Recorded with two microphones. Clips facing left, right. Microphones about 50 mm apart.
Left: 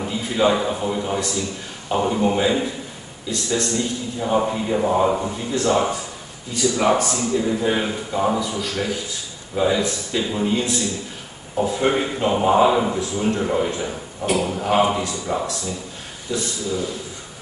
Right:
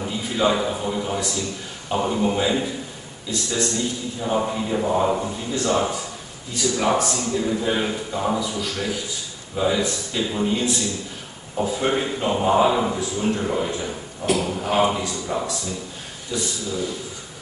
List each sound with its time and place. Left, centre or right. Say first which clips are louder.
0.0 s a man's voice: left 2 dB; centre